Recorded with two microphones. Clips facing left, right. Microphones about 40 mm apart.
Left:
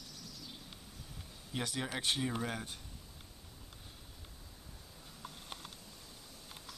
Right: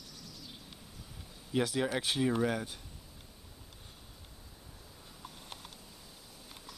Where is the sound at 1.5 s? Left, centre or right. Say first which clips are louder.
Right 7 dB; centre.